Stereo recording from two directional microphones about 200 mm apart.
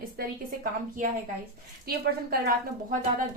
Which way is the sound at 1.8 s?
50° right (ahead or behind).